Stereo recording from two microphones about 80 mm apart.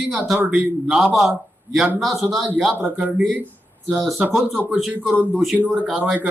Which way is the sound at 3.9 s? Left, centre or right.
Centre.